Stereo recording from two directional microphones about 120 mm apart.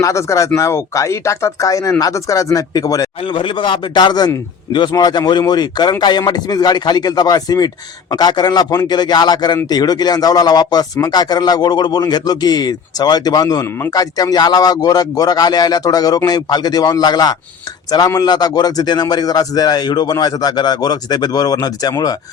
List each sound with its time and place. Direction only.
0.0 s speech: 25° left (ahead or behind)
3.3 s a man's voice: 40° left (ahead or behind)